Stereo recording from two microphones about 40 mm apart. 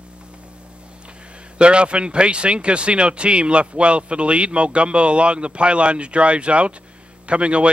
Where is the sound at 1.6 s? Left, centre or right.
Right.